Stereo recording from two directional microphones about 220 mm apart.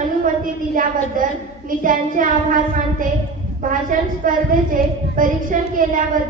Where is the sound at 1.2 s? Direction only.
40° right (ahead or behind).